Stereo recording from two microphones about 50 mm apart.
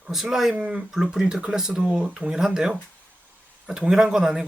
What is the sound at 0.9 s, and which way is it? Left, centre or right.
Speech, centre.